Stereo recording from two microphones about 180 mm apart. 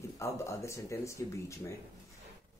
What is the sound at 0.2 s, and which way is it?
Speech, 15° left (ahead or behind).